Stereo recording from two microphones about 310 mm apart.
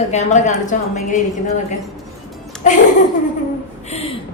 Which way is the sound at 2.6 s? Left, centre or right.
Left.